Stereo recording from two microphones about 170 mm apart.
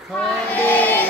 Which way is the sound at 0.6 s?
10° left (ahead or behind).